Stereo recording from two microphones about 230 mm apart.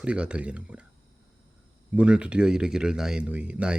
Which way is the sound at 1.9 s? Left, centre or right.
Centre.